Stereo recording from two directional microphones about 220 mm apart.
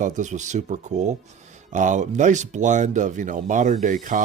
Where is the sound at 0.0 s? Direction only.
35° right (ahead or behind).